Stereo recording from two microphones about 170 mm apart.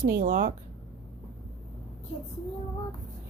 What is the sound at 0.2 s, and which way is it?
Speech, 55° right (ahead or behind).